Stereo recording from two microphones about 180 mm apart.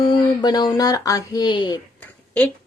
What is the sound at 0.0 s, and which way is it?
Speech, 25° left (ahead or behind).